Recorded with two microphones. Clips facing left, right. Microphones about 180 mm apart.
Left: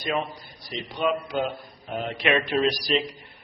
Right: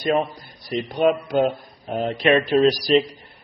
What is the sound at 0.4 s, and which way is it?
A man's voice, 50° right (ahead or behind).